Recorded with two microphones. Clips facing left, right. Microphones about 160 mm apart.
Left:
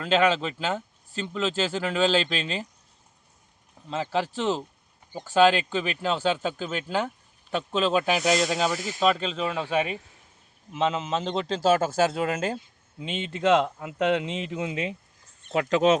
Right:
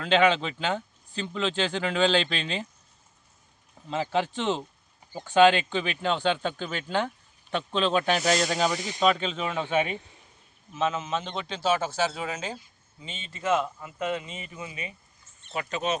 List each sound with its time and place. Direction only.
0.0 s speech: centre (ahead or behind)
3.8 s speech: centre (ahead or behind)
10.8 s a man's voice: 30° left (ahead or behind); by 12.5 s 50° left (ahead or behind)
13.0 s speech: 65° left (ahead or behind); by 16.0 s 90° left